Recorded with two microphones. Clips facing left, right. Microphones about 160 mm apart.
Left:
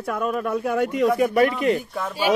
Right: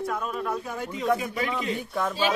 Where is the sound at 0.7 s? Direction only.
70° left (ahead or behind).